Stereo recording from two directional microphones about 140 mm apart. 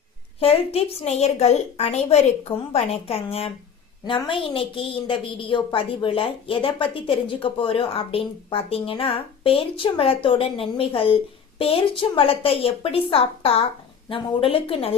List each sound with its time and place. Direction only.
0.3 s a woman's voice: 45° left (ahead or behind)